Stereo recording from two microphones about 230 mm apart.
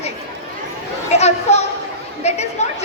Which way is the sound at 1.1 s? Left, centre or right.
Left.